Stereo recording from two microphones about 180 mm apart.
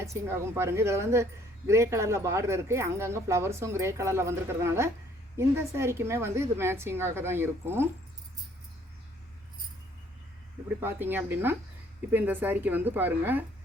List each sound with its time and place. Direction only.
0.0 s speech: 15° right (ahead or behind)
10.8 s speech: 10° right (ahead or behind)